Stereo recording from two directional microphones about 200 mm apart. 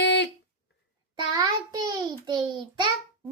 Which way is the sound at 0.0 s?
60° left (ahead or behind).